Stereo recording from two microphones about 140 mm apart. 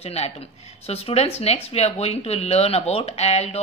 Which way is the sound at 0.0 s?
50° left (ahead or behind).